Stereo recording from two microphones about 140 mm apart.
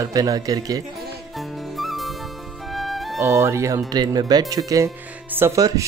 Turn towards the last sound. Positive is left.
turn(degrees=-25)  # may be behind; listen again after turning